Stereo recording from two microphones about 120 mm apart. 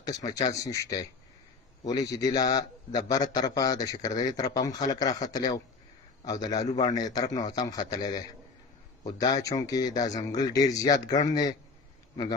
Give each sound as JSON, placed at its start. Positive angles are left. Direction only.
{"t": 0.0, "sound": "a man's voice", "side_deg": 30}